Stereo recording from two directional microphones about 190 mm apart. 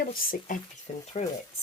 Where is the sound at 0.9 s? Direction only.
35° left (ahead or behind).